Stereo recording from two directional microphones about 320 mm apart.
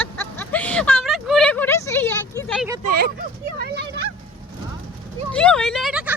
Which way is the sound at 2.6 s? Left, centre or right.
Centre.